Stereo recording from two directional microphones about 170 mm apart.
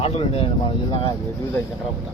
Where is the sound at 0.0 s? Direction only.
35° left (ahead or behind).